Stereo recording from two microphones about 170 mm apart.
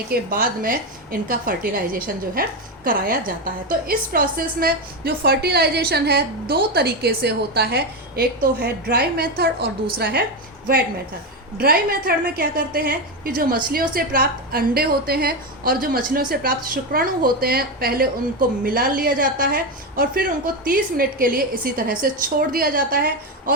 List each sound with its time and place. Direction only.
0.1 s a woman's voice: 60° right (ahead or behind)
11.5 s a woman's voice: 60° right (ahead or behind)